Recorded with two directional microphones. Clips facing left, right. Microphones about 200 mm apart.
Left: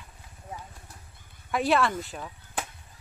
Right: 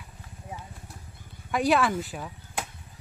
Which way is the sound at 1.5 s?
Centre (ahead or behind).